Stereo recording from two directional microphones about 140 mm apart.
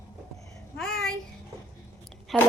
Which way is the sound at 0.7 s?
5° left (ahead or behind).